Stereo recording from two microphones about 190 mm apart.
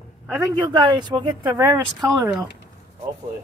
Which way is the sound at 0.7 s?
25° right (ahead or behind).